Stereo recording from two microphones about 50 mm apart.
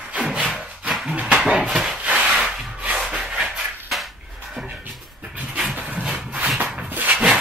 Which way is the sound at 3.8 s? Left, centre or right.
Centre.